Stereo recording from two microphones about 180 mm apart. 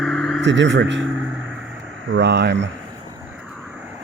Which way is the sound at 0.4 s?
90° right.